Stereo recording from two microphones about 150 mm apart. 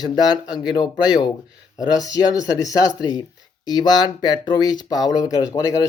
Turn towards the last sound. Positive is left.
turn(degrees=20)  # may be behind; listen again after turning